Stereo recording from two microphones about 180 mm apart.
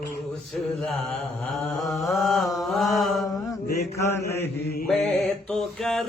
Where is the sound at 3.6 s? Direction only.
60° left (ahead or behind).